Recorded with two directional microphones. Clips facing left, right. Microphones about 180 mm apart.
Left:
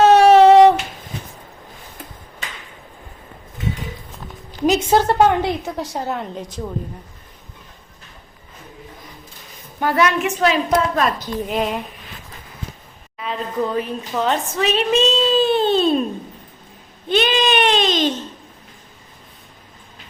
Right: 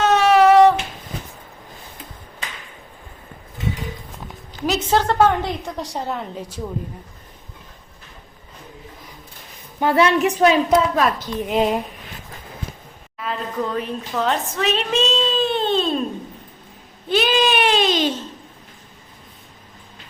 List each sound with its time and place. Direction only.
0.0 s a sound: 35° left (ahead or behind)
4.6 s a woman's voice: 15° left (ahead or behind); by 6.6 s centre (ahead or behind)
9.8 s a woman's voice: 25° right (ahead or behind)
10.7 s a woman's voice: 5° right (ahead or behind)
11.4 s speech: 25° right (ahead or behind)
13.1 s a woman's voice: centre (ahead or behind)
17.1 s baby cry: 5° right (ahead or behind)